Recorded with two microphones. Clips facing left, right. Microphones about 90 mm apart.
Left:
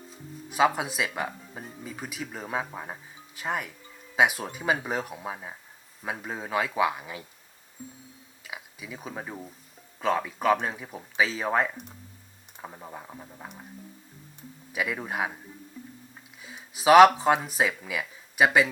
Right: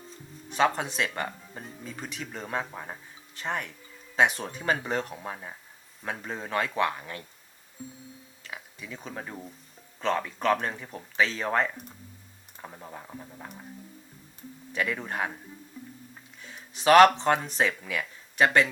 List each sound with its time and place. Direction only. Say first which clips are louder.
0.1 s speech: left 2 dB; 5° left (ahead or behind)
8.4 s speech: left 1 dB; 5° left (ahead or behind)
14.7 s speech: even; 10° left (ahead or behind)
16.4 s speech: left 1 dB; 5° left (ahead or behind)